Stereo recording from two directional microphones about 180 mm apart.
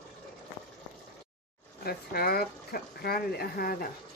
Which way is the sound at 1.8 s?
60° left (ahead or behind).